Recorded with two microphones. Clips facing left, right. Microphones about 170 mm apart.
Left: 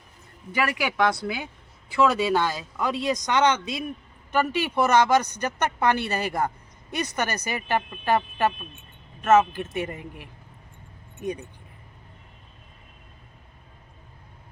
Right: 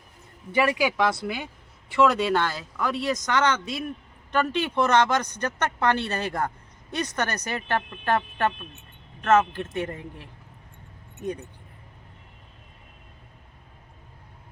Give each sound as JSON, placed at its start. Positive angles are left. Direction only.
{"t": 0.5, "sound": "a man's voice", "side_deg": -25}
{"t": 0.9, "sound": "speech", "side_deg": -5}